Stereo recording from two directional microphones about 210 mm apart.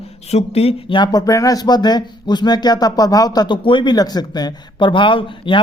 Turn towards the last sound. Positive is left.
turn(degrees=25)  # may be behind; listen again after turning